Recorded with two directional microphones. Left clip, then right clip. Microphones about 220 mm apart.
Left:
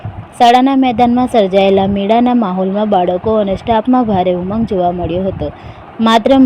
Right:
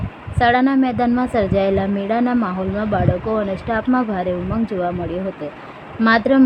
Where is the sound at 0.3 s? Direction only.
20° left (ahead or behind).